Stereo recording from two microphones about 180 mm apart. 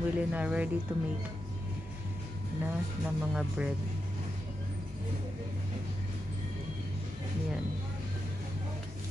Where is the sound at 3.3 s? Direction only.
5° right (ahead or behind).